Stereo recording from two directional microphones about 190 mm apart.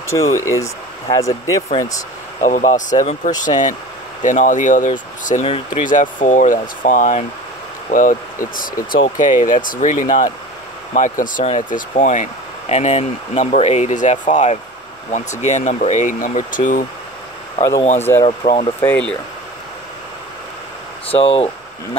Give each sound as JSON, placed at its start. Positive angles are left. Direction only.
{"t": 0.1, "sound": "speech", "side_deg": 15}
{"t": 2.4, "sound": "speech", "side_deg": 45}
{"t": 5.9, "sound": "speech", "side_deg": 45}
{"t": 18.2, "sound": "speech", "side_deg": 30}
{"t": 18.8, "sound": "speech", "side_deg": 10}
{"t": 21.1, "sound": "speech", "side_deg": 30}